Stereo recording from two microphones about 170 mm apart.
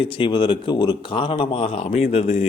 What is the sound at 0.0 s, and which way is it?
Speech, 30° left (ahead or behind).